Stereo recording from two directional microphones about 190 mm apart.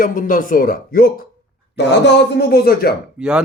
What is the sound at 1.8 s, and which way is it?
Speech, 65° left (ahead or behind).